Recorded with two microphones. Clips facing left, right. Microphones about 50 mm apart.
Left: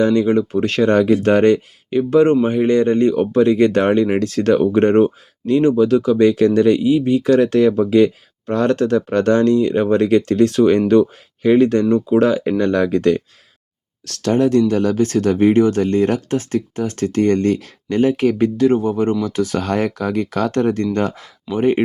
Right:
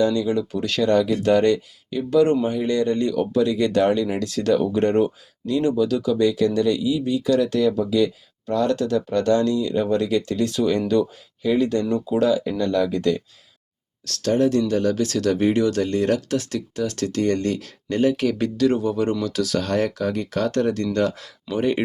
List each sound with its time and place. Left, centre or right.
0.0 s speech: left
19.5 s speech: left